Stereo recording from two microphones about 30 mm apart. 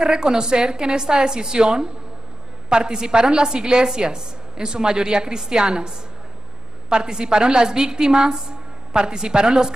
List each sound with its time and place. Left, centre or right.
0.0 s a woman's voice: right